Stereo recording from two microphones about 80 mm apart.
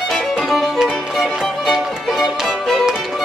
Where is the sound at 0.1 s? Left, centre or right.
Centre.